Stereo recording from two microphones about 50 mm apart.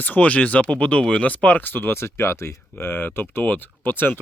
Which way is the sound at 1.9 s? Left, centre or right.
Left.